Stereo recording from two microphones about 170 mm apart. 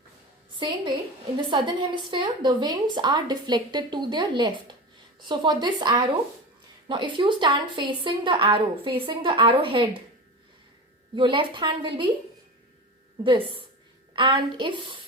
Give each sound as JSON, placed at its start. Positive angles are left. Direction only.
{"t": 1.4, "sound": "a woman's voice", "side_deg": -30}
{"t": 11.1, "sound": "a woman's voice", "side_deg": -30}
{"t": 13.2, "sound": "a woman's voice", "side_deg": -30}